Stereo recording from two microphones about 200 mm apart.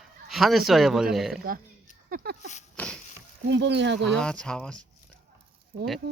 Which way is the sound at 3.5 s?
60° right (ahead or behind).